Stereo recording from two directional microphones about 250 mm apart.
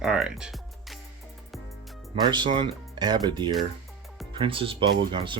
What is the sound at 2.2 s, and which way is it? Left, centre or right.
Speech, centre.